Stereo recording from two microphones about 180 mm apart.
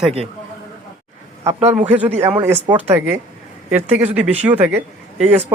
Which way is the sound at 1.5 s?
35° right (ahead or behind).